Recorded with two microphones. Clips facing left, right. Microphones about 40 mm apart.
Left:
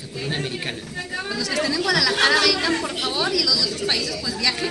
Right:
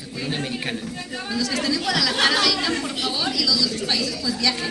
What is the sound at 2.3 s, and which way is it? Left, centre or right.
Speech, left.